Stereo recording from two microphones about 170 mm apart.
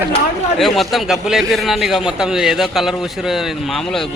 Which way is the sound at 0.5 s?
Centre (ahead or behind).